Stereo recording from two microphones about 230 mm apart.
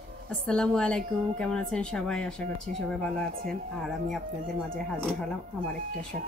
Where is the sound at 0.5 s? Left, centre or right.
Centre.